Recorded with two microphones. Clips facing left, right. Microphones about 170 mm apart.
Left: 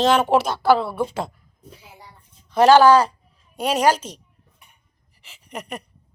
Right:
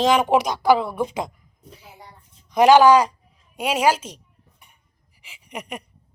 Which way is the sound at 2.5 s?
15° right (ahead or behind).